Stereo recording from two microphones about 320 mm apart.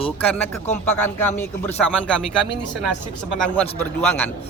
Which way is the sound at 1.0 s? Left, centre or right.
Centre.